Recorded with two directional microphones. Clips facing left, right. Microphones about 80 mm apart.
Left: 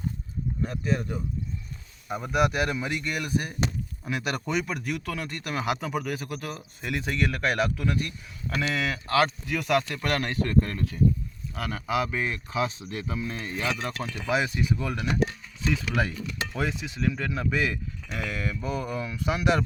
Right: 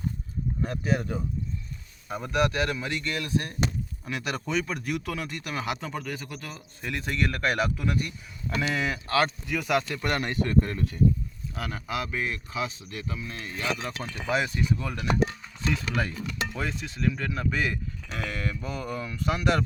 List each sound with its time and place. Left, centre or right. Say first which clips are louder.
0.6 s speech: right 1 dB; centre
2.0 s speech: left 1 dB; centre
11.9 s speech: left 4 dB; centre
13.1 s speech: left 4 dB; centre
13.8 s speech: left 1 dB; centre